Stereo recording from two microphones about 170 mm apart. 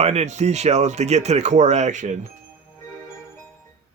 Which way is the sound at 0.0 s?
40° right (ahead or behind).